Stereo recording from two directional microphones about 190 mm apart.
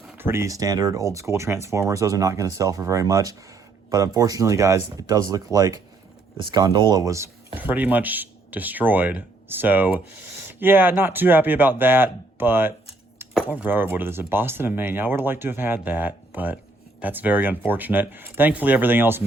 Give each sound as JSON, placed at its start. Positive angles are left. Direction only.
{"t": 0.2, "sound": "speech", "side_deg": -15}